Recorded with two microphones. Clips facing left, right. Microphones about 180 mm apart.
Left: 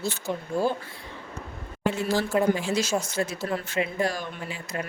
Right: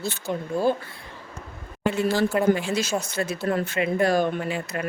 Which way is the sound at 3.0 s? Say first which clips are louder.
Right 1 dB; 60° right (ahead or behind).